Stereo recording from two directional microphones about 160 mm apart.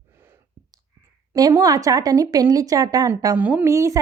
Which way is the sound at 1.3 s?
25° right (ahead or behind).